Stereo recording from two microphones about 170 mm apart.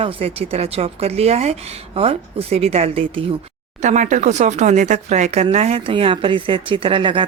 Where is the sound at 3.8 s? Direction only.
45° right (ahead or behind); by 7.3 s 30° right (ahead or behind).